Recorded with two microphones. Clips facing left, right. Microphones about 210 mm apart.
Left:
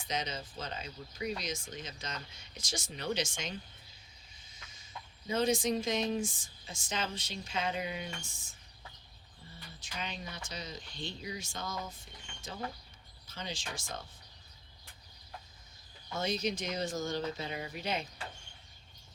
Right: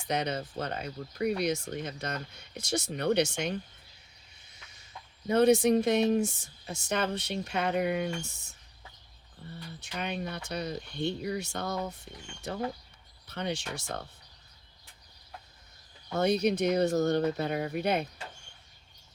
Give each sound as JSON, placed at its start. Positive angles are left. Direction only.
{"t": 0.1, "sound": "speech", "side_deg": -60}
{"t": 5.3, "sound": "speech", "side_deg": -65}
{"t": 16.1, "sound": "speech", "side_deg": -60}